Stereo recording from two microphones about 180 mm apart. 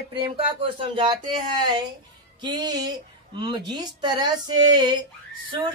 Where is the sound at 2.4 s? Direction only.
25° right (ahead or behind).